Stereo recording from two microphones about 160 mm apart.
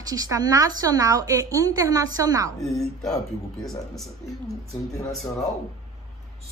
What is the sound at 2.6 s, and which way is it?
Speech, centre (ahead or behind).